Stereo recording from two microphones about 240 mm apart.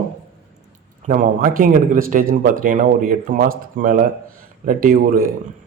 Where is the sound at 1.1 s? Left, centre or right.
Right.